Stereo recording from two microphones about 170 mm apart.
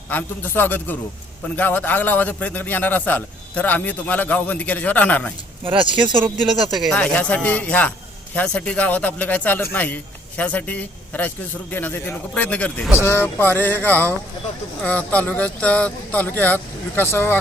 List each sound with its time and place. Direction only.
0.1 s a man's voice: 10° left (ahead or behind)
5.6 s speech: 30° right (ahead or behind)
6.7 s a man's voice: 5° left (ahead or behind)